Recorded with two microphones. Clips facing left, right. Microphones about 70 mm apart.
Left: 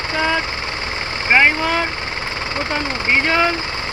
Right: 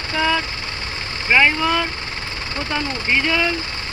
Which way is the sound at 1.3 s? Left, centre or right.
Left.